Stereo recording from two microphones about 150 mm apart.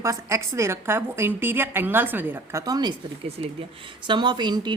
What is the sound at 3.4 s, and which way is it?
Speech, 40° right (ahead or behind).